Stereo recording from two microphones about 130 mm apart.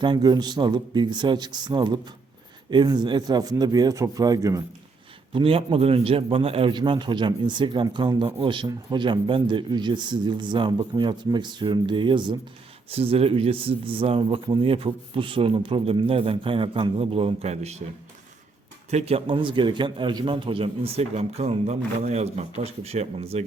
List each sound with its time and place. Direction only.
0.0 s a man's voice: 35° right (ahead or behind)
5.3 s a man's voice: 45° right (ahead or behind)
12.9 s speech: 50° right (ahead or behind)
18.9 s speech: 55° right (ahead or behind)